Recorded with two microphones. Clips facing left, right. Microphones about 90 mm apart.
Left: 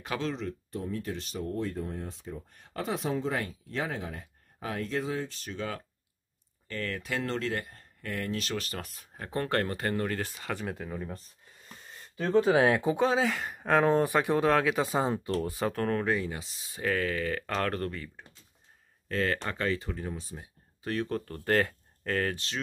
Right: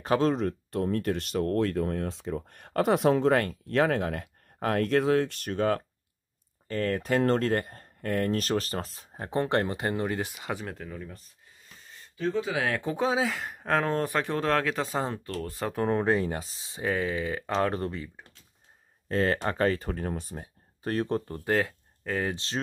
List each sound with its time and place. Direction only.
0.0 s speech: 40° right (ahead or behind)
6.7 s speech: 40° right (ahead or behind); by 10.6 s 15° right (ahead or behind)
10.6 s speech: centre (ahead or behind)
10.9 s speech: 25° left (ahead or behind)
12.2 s speech: 55° left (ahead or behind)
12.6 s speech: 20° left (ahead or behind)
12.9 s speech: centre (ahead or behind)
15.7 s speech: 20° right (ahead or behind)
16.1 s speech: 40° right (ahead or behind); by 18.2 s 20° right (ahead or behind)
19.0 s speech: 30° right (ahead or behind)
21.5 s speech: 5° right (ahead or behind)
22.3 s speech: 30° right (ahead or behind)